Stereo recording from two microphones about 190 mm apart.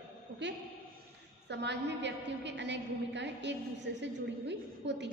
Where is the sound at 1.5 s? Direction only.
65° right (ahead or behind).